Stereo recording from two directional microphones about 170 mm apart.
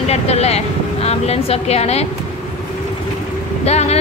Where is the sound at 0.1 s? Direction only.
40° left (ahead or behind).